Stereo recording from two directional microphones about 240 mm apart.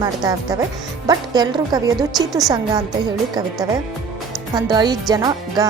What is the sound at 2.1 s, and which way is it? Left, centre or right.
Speech, centre.